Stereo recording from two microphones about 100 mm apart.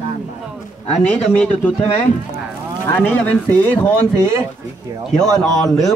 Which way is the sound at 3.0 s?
15° left (ahead or behind).